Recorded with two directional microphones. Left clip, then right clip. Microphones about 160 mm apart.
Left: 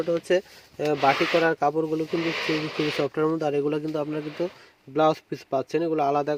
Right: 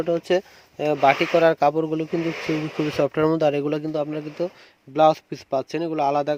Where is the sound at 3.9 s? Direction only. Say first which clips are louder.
Right 2 dB; 10° right (ahead or behind).